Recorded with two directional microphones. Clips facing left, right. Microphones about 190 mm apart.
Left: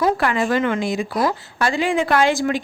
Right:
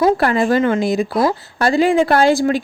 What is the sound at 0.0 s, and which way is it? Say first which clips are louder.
Speech: right 4 dB; 35° right (ahead or behind).